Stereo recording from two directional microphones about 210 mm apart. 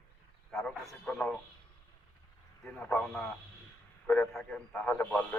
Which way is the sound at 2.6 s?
5° left (ahead or behind).